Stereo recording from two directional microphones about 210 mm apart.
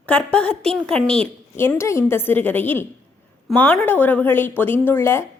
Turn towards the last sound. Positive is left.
turn(degrees=10)  # may be behind; listen again after turning